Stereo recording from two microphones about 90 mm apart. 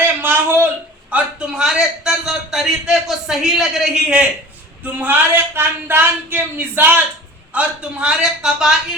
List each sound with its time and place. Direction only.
0.2 s a sound: 25° right (ahead or behind)
1.1 s a man's voice: 10° right (ahead or behind)
4.8 s a man's voice: 20° right (ahead or behind)